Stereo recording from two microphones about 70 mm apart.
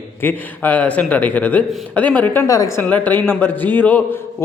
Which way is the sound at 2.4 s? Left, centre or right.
Left.